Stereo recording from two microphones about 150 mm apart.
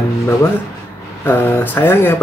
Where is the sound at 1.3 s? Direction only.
15° left (ahead or behind).